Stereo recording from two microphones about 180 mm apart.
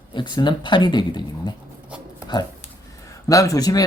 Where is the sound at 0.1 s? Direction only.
25° left (ahead or behind).